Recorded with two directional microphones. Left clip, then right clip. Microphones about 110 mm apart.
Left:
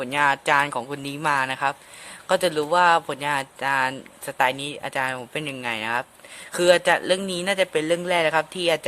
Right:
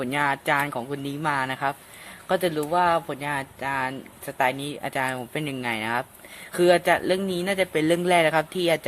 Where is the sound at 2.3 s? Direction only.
35° left (ahead or behind).